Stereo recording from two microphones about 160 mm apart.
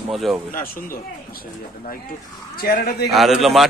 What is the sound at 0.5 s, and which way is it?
Speech, 60° left (ahead or behind).